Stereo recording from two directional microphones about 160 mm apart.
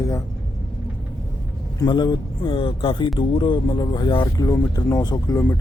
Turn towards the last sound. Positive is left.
turn(degrees=25)  # may be behind; listen again after turning